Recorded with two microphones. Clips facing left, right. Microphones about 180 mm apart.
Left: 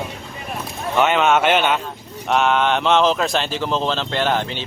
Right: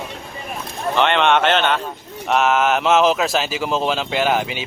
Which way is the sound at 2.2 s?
Centre (ahead or behind).